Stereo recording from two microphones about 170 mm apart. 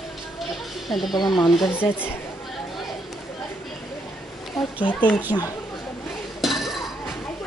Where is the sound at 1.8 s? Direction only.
10° left (ahead or behind).